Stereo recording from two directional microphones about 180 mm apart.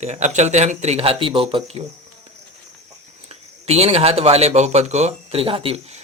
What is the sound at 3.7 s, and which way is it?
Speech, 35° right (ahead or behind).